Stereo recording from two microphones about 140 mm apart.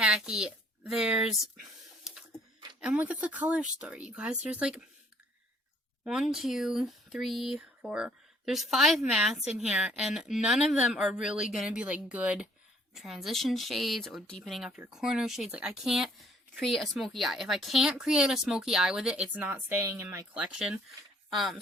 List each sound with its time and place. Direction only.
0.0 s speech: 5° right (ahead or behind)
2.8 s speech: 10° right (ahead or behind)
6.1 s speech: 5° right (ahead or behind); by 20.2 s 20° right (ahead or behind)
20.3 s speech: 5° right (ahead or behind)